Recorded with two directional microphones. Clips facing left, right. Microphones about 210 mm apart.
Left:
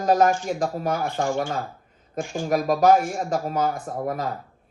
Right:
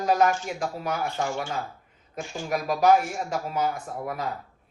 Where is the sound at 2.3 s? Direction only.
50° left (ahead or behind).